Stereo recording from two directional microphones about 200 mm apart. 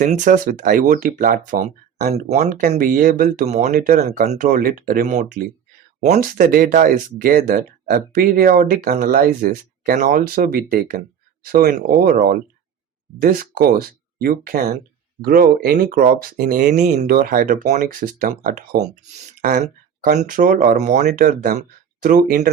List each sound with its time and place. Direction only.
0.0 s speech: 40° right (ahead or behind)
17.2 s speech: 50° right (ahead or behind)
20.7 s speech: 35° right (ahead or behind)